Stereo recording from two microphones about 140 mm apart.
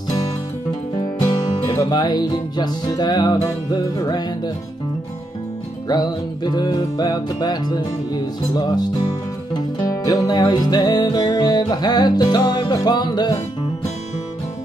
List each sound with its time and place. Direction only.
1.7 s music: 30° left (ahead or behind)
5.9 s music: 30° left (ahead or behind)